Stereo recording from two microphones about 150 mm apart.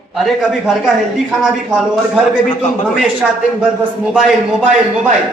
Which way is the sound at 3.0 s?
5° right (ahead or behind).